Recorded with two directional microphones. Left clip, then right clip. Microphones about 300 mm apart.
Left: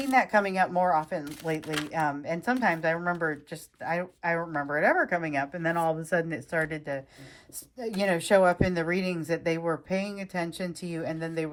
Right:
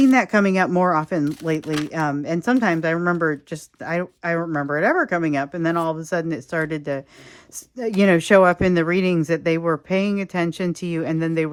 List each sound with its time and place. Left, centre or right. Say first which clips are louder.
0.1 s speech: right 6 dB; centre
1.6 s speech: right 7 dB; centre
1.9 s speech: right 3 dB; centre